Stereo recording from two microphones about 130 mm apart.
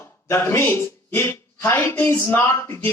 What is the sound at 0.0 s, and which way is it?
Speech, 20° left (ahead or behind).